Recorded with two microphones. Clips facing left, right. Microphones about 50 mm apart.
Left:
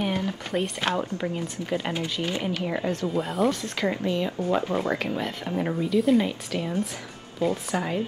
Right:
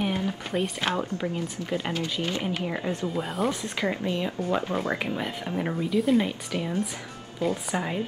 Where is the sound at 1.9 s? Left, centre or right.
Centre.